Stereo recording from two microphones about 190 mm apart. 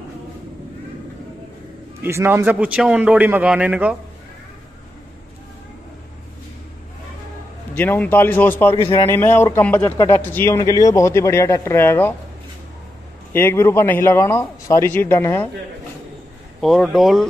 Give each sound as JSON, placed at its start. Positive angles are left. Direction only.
{"t": 2.0, "sound": "a man's voice", "side_deg": -15}
{"t": 7.7, "sound": "speech", "side_deg": 10}
{"t": 13.3, "sound": "speech", "side_deg": 10}
{"t": 16.6, "sound": "speech", "side_deg": 0}